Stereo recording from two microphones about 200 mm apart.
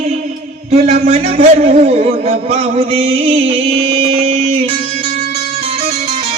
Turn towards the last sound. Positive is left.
turn(degrees=-30)  # may be behind; listen again after turning